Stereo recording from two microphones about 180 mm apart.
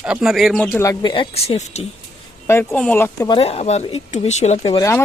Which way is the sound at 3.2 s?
25° left (ahead or behind).